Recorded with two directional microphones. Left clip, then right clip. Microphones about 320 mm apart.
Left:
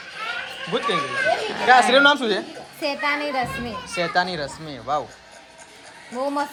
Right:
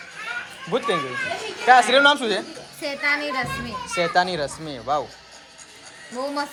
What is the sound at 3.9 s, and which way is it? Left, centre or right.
Speech, centre.